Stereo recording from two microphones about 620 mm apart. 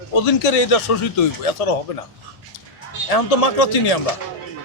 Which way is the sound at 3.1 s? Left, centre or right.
Left.